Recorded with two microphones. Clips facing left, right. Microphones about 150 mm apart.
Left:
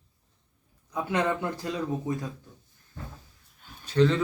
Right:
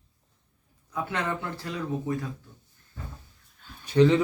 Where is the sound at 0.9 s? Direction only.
15° left (ahead or behind).